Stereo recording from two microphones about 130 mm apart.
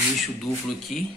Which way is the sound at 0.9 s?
Centre (ahead or behind).